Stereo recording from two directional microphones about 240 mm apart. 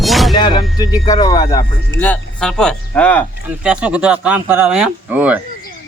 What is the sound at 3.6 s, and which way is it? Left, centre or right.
Speech, centre.